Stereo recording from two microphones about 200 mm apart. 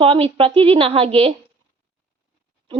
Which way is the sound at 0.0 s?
25° right (ahead or behind).